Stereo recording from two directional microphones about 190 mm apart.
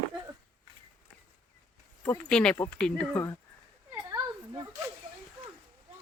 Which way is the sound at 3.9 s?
15° right (ahead or behind).